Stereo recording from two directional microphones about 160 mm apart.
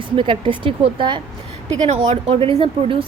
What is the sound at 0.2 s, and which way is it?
Speech, 30° right (ahead or behind).